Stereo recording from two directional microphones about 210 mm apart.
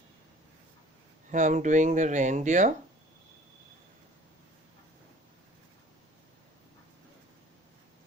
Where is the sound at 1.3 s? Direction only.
35° right (ahead or behind).